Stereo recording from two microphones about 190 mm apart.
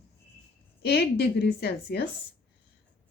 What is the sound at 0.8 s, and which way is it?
A woman's voice, 60° left (ahead or behind).